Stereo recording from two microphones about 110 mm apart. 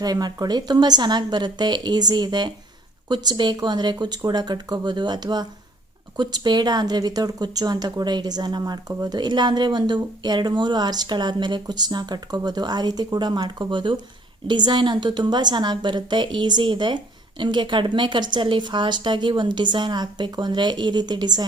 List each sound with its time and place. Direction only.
0.0 s a woman's voice: 35° right (ahead or behind)